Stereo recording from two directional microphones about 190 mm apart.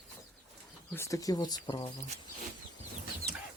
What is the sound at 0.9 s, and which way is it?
Speech, 15° left (ahead or behind).